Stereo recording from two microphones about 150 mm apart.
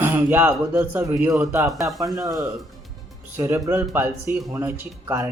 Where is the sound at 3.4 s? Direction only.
20° right (ahead or behind).